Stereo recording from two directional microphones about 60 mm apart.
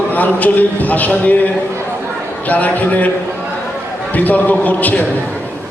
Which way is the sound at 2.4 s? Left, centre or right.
Left.